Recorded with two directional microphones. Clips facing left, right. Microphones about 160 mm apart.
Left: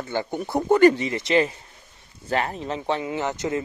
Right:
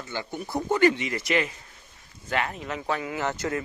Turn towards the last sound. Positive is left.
turn(degrees=20)  # may be behind; listen again after turning